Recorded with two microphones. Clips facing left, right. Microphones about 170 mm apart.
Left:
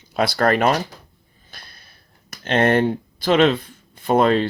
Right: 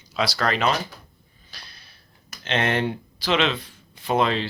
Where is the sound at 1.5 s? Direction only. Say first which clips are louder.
Left 2 dB; 50° left (ahead or behind).